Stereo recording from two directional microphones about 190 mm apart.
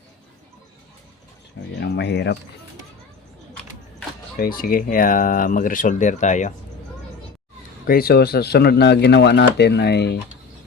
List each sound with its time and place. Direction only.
1.8 s speech: 65° left (ahead or behind)
4.4 s speech: 50° left (ahead or behind)
7.9 s speech: 55° left (ahead or behind)